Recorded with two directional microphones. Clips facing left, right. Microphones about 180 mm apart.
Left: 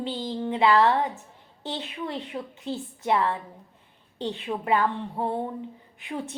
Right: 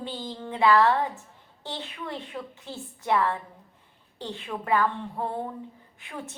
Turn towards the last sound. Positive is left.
turn(degrees=20)  # may be behind; listen again after turning